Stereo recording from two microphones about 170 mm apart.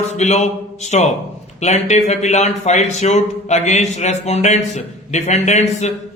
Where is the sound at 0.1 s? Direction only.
40° left (ahead or behind).